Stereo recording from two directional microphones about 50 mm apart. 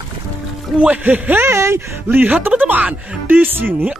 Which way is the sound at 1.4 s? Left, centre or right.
Right.